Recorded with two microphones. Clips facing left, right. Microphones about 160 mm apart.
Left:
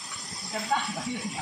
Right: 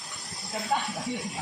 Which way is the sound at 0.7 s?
5° right (ahead or behind).